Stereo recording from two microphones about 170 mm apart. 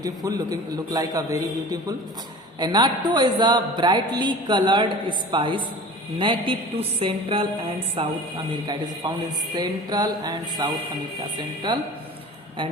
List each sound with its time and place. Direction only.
0.0 s a man's voice: 20° right (ahead or behind)
7.0 s music: 30° right (ahead or behind)
9.0 s a man's voice: 25° right (ahead or behind)